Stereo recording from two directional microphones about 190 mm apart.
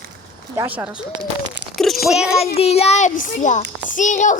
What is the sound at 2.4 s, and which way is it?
A child's voice, 35° left (ahead or behind).